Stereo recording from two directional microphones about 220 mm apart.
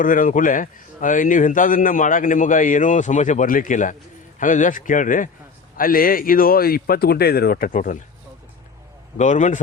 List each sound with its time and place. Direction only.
0.0 s a man's voice: 40° left (ahead or behind)
9.1 s a man's voice: 35° left (ahead or behind)